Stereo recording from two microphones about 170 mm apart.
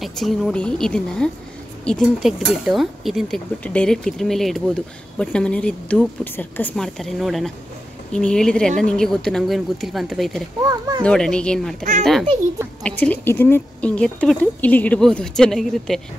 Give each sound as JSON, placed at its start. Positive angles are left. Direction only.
{"t": 0.0, "sound": "speech", "side_deg": 0}
{"t": 10.6, "sound": "speech", "side_deg": -20}
{"t": 11.1, "sound": "speech", "side_deg": 5}